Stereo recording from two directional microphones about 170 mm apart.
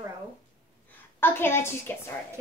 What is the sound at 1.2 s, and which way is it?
Speech, 15° left (ahead or behind).